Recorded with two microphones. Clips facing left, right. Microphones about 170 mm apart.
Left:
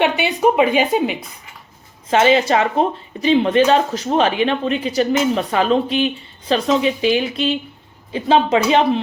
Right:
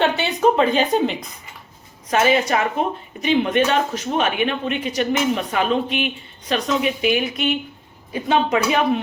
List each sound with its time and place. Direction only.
0.0 s speech: 10° left (ahead or behind)
2.0 s speech: 25° left (ahead or behind)